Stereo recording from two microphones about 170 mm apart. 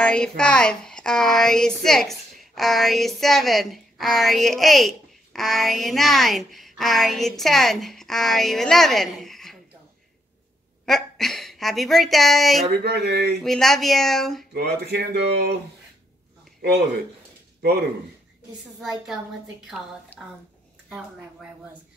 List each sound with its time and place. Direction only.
0.0 s a woman's voice: 5° left (ahead or behind)
10.9 s a woman's voice: centre (ahead or behind)
12.8 s speech: 70° right (ahead or behind)
13.4 s a woman's voice: centre (ahead or behind)
14.5 s speech: 75° right (ahead or behind)
17.6 s speech: 65° right (ahead or behind)
18.8 s a woman's voice: centre (ahead or behind)
20.2 s a woman's voice: 5° right (ahead or behind)